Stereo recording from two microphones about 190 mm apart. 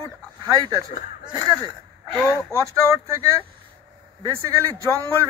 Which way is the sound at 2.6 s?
15° right (ahead or behind).